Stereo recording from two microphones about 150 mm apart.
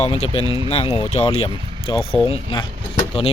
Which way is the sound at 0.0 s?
45° left (ahead or behind).